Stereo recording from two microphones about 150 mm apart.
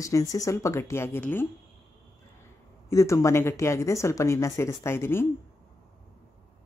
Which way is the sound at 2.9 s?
20° left (ahead or behind).